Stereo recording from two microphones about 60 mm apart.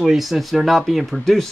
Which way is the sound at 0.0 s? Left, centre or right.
Centre.